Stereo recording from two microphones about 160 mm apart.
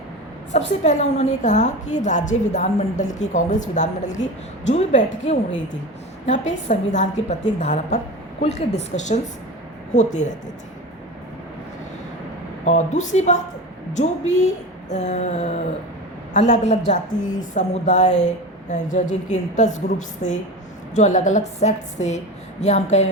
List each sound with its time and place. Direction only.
0.5 s a woman's voice: 45° left (ahead or behind)
12.6 s a woman's voice: 50° left (ahead or behind)